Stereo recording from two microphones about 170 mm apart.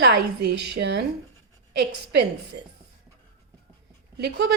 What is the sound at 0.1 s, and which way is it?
Speech, 75° right (ahead or behind).